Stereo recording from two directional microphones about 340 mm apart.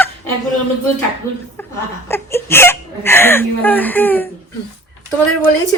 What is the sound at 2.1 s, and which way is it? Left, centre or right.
Speech, centre.